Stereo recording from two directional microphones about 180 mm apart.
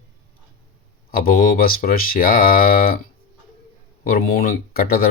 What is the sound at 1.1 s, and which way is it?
Speech, 55° left (ahead or behind).